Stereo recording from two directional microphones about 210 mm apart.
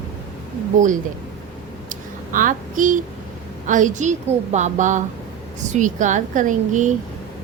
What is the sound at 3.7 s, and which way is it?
A woman's voice, 35° right (ahead or behind).